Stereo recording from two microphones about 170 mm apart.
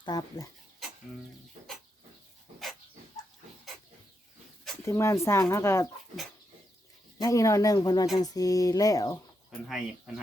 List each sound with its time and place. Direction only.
0.0 s speech: 20° left (ahead or behind)
4.9 s speech: 15° left (ahead or behind)
7.2 s speech: 20° left (ahead or behind)
9.6 s speech: centre (ahead or behind)